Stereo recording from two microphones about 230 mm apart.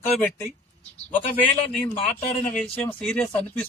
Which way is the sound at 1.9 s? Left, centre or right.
Left.